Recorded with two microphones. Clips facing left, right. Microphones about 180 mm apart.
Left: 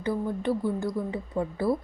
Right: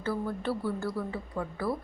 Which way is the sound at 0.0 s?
15° left (ahead or behind).